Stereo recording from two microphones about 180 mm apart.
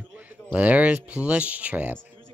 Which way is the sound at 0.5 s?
10° right (ahead or behind).